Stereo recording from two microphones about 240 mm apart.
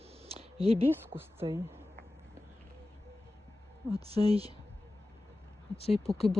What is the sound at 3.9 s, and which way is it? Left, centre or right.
Speech, right.